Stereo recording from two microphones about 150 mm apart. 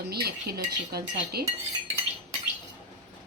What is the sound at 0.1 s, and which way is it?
Speech, 90° right.